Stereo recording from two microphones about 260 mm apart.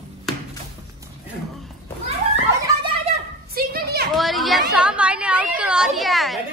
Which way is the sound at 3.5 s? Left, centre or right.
Right.